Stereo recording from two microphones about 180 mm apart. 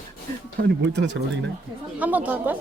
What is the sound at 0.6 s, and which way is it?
Speech, 70° right (ahead or behind).